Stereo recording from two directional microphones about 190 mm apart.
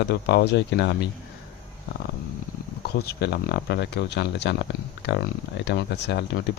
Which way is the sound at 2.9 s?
60° left (ahead or behind).